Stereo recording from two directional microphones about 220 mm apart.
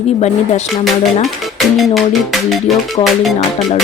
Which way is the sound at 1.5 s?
Centre (ahead or behind).